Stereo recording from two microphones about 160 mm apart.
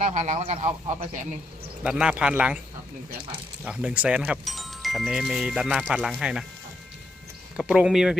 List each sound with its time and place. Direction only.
0.0 s speech: 45° right (ahead or behind)
1.8 s speech: 5° right (ahead or behind)
3.6 s speech: 5° right (ahead or behind)
7.5 s speech: 5° right (ahead or behind)